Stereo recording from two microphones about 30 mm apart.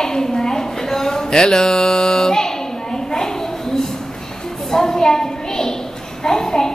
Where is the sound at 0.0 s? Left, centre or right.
Left.